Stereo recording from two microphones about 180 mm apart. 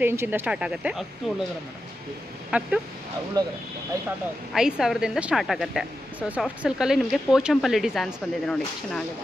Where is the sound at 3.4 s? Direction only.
25° right (ahead or behind).